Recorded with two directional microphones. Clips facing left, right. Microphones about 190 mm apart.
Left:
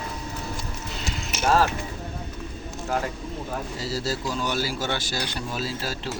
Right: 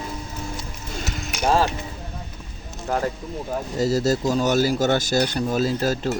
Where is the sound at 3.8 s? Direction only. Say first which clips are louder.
Right 11 dB; 45° right (ahead or behind).